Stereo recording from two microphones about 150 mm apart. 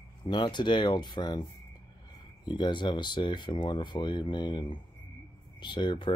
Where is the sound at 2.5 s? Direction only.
30° left (ahead or behind).